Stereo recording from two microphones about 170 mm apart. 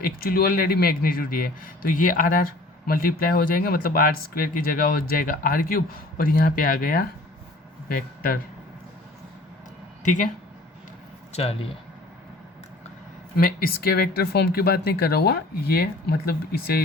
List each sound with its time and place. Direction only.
0.0 s speech: 60° left (ahead or behind)
10.0 s speech: 45° left (ahead or behind)
11.3 s speech: 35° left (ahead or behind)
13.3 s speech: 60° left (ahead or behind)